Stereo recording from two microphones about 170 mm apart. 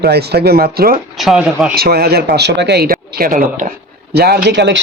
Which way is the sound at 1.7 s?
65° right (ahead or behind).